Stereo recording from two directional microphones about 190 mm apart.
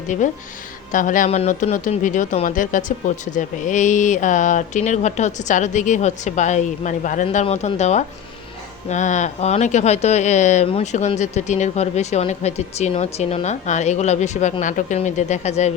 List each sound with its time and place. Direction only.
0.1 s speech: 40° left (ahead or behind)